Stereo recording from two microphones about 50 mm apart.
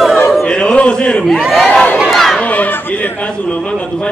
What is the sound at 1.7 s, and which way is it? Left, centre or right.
Crowd, left.